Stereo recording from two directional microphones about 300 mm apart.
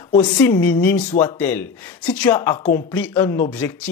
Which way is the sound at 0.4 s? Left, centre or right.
Centre.